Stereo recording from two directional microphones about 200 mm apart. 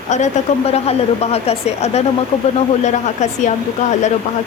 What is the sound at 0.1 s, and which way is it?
Speech, 35° left (ahead or behind).